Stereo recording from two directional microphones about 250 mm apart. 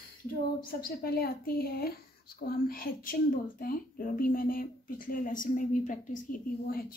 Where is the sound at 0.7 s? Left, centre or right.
Left.